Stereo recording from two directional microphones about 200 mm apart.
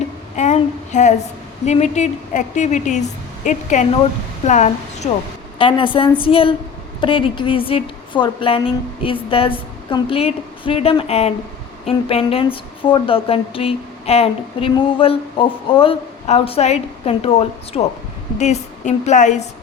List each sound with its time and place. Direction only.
0.3 s child singing: 35° left (ahead or behind)
1.6 s a woman's voice: 35° left (ahead or behind)